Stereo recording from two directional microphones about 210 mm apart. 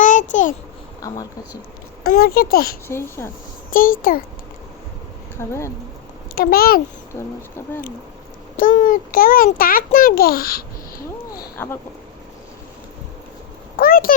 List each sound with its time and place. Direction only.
0.0 s a sound: 35° left (ahead or behind)
1.0 s speech: 15° left (ahead or behind)
2.0 s a child's voice: 45° left (ahead or behind)
2.8 s speech: 10° left (ahead or behind)
3.7 s a child's voice: 40° left (ahead or behind)
5.4 s speech: 10° left (ahead or behind)
6.3 s a child's voice: 45° left (ahead or behind)
7.2 s speech: 10° left (ahead or behind)
8.5 s a child's voice: 40° left (ahead or behind)
11.5 s speech: 10° left (ahead or behind)
13.7 s a sound: 45° left (ahead or behind)